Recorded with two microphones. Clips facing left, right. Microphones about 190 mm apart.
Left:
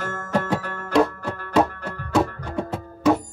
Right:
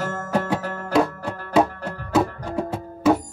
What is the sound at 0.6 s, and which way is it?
Music, 40° right (ahead or behind).